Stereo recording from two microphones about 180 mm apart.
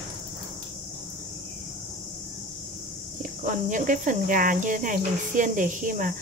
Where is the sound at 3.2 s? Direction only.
45° right (ahead or behind).